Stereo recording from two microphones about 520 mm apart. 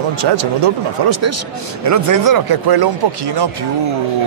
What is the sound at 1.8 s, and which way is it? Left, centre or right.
Speech, right.